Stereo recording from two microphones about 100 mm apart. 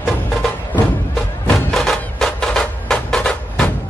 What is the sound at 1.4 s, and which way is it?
Music, 5° left (ahead or behind).